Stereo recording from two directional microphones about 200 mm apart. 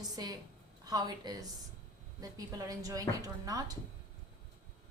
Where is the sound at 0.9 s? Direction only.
20° right (ahead or behind).